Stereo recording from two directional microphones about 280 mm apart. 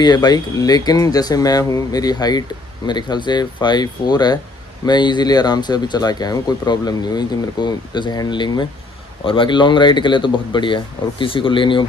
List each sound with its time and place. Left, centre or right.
0.0 s speech: centre